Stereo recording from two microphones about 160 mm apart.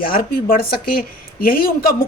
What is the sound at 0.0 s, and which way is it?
Speech, 65° left (ahead or behind).